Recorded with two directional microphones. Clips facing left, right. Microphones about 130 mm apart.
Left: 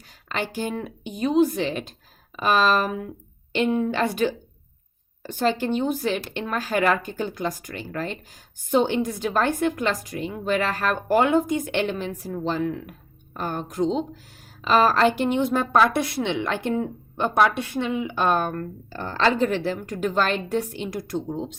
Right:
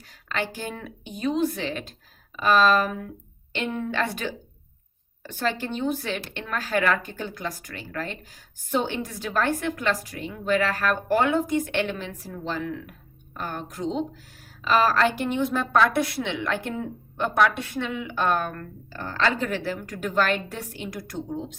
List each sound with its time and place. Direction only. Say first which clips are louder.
0.1 s a woman's voice: left 1 dB; 15° left (ahead or behind)
5.5 s a woman's voice: left 3 dB; 15° left (ahead or behind)